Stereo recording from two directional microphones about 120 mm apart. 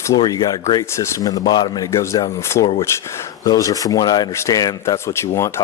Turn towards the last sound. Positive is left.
turn(degrees=25)  # may be behind; listen again after turning